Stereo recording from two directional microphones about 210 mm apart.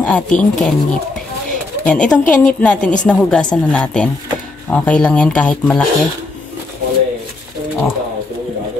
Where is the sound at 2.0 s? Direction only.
35° left (ahead or behind).